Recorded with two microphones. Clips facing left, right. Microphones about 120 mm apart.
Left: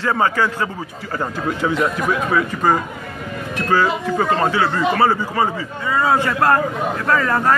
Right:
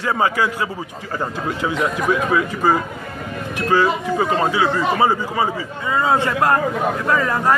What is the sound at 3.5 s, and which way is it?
Speech, 10° right (ahead or behind).